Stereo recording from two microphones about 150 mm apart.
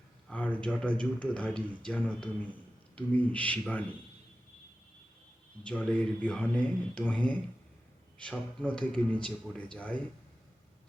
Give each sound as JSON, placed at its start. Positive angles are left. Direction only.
{"t": 0.3, "sound": "speech", "side_deg": 10}
{"t": 5.6, "sound": "speech", "side_deg": 5}